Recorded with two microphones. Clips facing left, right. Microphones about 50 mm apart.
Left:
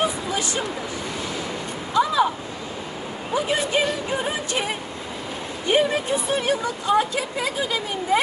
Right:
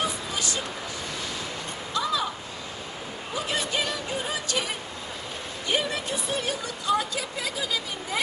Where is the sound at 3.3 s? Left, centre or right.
Left.